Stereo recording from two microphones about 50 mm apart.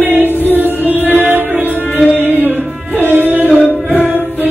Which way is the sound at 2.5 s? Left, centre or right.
Right.